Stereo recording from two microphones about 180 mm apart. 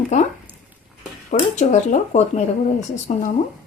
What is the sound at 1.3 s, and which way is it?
Speech, 40° left (ahead or behind).